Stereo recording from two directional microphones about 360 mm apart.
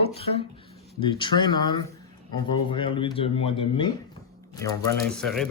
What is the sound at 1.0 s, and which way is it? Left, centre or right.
Speech, centre.